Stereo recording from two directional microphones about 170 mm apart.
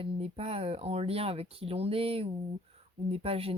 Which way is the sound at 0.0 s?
35° right (ahead or behind).